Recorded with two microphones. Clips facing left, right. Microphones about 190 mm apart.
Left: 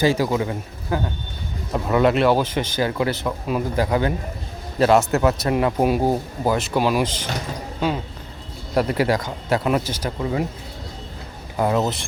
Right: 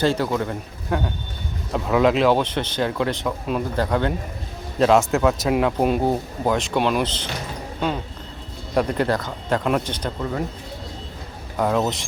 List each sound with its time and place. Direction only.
0.0 s speech: 10° left (ahead or behind)
8.7 s speech: 5° left (ahead or behind)
11.5 s speech: 5° left (ahead or behind)